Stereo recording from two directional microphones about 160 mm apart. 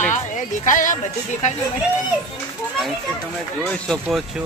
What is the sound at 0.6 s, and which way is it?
Speech, 55° left (ahead or behind).